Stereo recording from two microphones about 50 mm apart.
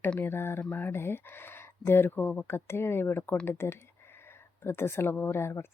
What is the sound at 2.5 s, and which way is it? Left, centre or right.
Speech, left.